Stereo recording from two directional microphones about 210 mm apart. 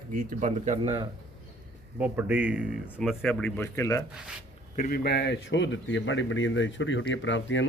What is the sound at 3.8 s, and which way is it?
Speech, 15° left (ahead or behind).